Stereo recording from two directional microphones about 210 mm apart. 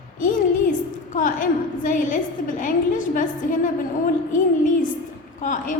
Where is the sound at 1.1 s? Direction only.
40° left (ahead or behind).